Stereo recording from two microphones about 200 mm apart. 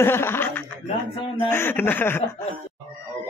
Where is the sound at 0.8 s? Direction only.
25° left (ahead or behind).